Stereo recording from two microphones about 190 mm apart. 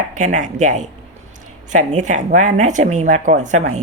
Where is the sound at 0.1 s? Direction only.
40° right (ahead or behind).